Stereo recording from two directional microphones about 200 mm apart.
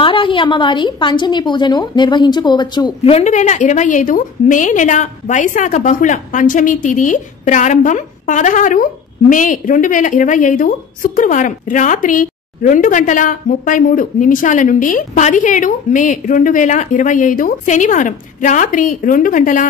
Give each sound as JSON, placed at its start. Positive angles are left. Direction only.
{"t": 0.0, "sound": "a woman's voice", "side_deg": 25}